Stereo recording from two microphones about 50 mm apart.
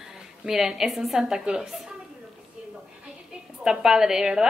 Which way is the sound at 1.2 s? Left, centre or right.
Centre.